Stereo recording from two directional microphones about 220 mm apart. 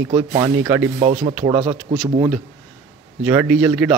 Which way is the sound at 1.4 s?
20° right (ahead or behind).